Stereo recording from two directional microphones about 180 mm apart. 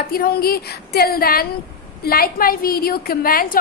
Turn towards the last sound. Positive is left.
turn(degrees=55)  # may be behind; listen again after turning